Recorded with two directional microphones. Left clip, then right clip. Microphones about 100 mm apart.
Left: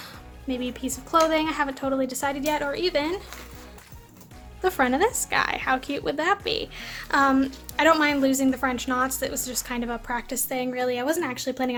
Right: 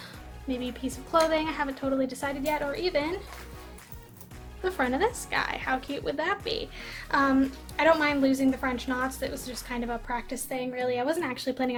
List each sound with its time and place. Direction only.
0.0 s a woman's voice: 45° left (ahead or behind)
4.6 s speech: 50° left (ahead or behind)
11.1 s speech: 25° left (ahead or behind)